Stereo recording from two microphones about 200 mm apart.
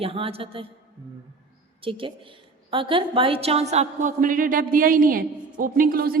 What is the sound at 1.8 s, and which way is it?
A woman's voice, 25° right (ahead or behind).